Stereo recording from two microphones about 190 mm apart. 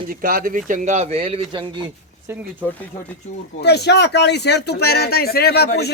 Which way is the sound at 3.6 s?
60° left (ahead or behind).